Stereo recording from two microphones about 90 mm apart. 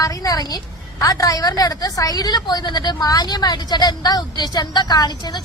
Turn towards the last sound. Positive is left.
turn(degrees=50)  # may be behind; listen again after turning